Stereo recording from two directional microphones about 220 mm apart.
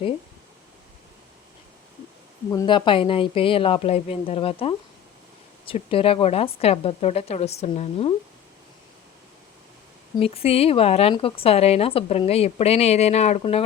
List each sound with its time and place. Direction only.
2.5 s speech: 20° left (ahead or behind)
10.2 s speech: 25° left (ahead or behind)